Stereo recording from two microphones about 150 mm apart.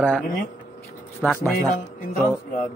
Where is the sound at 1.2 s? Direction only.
5° left (ahead or behind).